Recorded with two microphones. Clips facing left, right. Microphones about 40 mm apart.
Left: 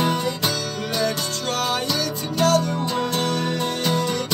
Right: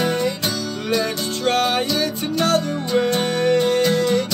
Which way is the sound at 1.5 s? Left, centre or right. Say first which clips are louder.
Right 5 dB; right.